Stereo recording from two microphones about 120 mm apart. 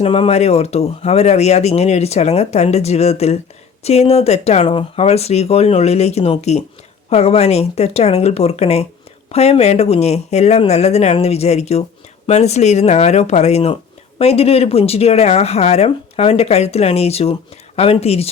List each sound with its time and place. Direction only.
0.0 s speech: 55° left (ahead or behind)